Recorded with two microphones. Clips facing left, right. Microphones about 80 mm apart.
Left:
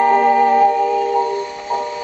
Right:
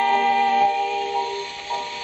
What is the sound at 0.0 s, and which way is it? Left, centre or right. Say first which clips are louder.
Music: left 6 dB; left.